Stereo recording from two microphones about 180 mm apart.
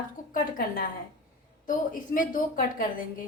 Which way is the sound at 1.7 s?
45° left (ahead or behind).